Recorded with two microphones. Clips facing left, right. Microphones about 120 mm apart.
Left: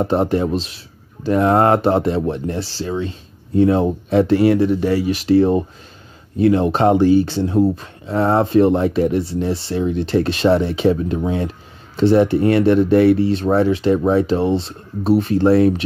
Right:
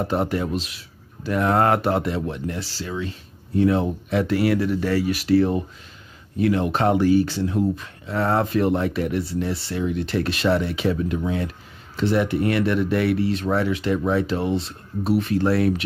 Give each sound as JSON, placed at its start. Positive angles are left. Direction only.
{"t": 0.0, "sound": "speech", "side_deg": 30}